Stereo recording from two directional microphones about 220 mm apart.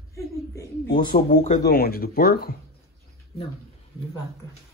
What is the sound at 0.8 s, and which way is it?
Speech, 40° left (ahead or behind).